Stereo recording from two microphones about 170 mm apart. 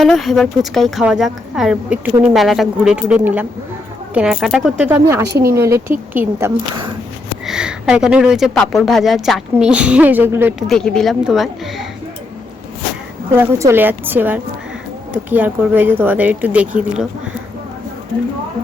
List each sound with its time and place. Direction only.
0.0 s speech: centre (ahead or behind)
5.3 s speech: 65° right (ahead or behind)
5.5 s speech: 15° right (ahead or behind)
10.7 s speech: 5° left (ahead or behind)
13.3 s speech: 15° right (ahead or behind)